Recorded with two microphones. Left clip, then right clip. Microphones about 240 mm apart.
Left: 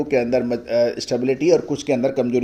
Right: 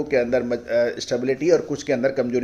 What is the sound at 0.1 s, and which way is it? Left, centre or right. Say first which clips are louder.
Speech: even; left.